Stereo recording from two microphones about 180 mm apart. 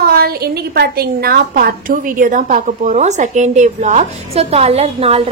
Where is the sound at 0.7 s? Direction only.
60° right (ahead or behind).